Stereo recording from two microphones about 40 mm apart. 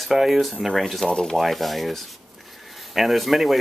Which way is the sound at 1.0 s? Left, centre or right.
Centre.